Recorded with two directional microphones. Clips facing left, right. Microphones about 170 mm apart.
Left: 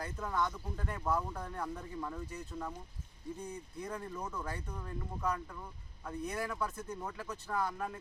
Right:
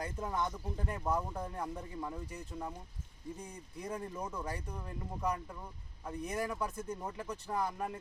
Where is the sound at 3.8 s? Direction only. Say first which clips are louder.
Right 2 dB; 20° right (ahead or behind).